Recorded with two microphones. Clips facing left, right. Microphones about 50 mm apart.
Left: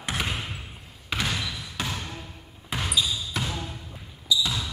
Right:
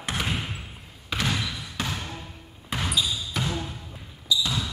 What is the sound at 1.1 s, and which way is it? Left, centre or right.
Basketball bounce, centre.